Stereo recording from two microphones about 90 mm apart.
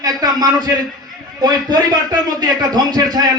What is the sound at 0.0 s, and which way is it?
Speech, 45° right (ahead or behind).